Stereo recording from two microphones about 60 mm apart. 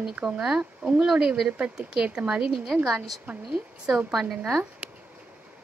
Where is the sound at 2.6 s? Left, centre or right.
Centre.